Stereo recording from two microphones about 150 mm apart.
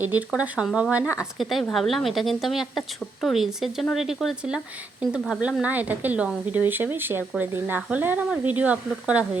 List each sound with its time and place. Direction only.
0.0 s a woman's voice: 10° right (ahead or behind)